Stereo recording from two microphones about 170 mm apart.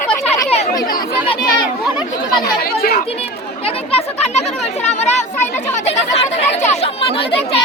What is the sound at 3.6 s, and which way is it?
Speech, 35° left (ahead or behind).